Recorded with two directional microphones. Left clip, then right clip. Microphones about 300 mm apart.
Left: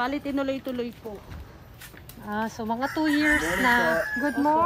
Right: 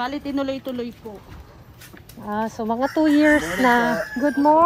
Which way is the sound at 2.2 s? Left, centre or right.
Centre.